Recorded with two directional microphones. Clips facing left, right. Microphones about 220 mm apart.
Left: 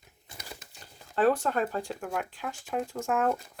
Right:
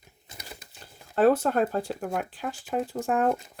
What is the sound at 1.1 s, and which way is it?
Speech, 40° right (ahead or behind).